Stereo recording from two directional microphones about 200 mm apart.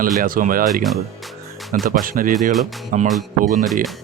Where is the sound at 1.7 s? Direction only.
45° right (ahead or behind).